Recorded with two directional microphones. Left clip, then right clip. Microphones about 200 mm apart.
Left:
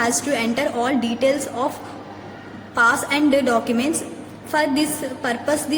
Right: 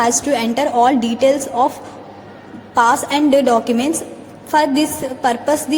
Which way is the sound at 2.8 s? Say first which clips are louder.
Right 4 dB; 20° right (ahead or behind).